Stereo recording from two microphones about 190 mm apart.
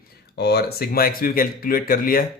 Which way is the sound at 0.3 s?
55° left (ahead or behind).